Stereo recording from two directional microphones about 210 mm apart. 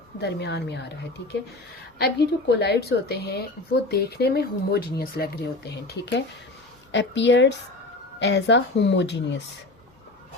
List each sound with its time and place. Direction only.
0.2 s speech: 50° left (ahead or behind)
2.0 s speech: 50° left (ahead or behind)